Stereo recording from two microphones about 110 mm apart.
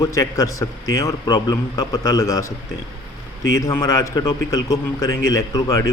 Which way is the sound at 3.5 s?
30° left (ahead or behind).